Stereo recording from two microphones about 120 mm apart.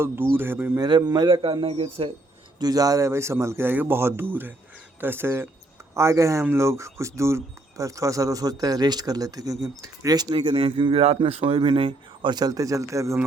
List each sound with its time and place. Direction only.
0.3 s speech: 15° right (ahead or behind)
0.8 s speech: 40° right (ahead or behind)
2.6 s speech: 30° right (ahead or behind)
11.0 s speech: 55° right (ahead or behind); by 13.1 s 25° right (ahead or behind)